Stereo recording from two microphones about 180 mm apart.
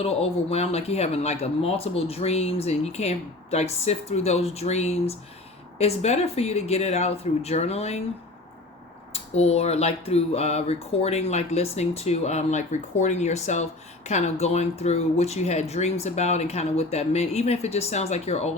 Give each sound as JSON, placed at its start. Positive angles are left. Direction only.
{"t": 0.0, "sound": "speech", "side_deg": 35}
{"t": 9.1, "sound": "speech", "side_deg": 35}